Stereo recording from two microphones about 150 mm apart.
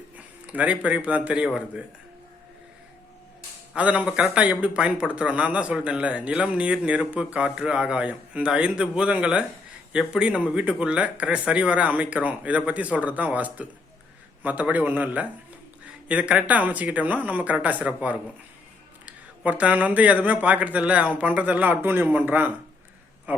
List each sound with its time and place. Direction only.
0.4 s speech: 10° right (ahead or behind)
3.8 s speech: 10° right (ahead or behind)